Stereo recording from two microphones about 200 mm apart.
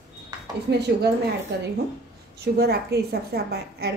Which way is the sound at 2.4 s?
55° right (ahead or behind).